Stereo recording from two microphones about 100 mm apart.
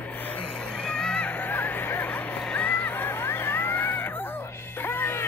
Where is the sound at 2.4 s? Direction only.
15° left (ahead or behind).